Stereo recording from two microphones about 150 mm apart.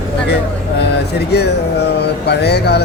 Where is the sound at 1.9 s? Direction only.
90° left.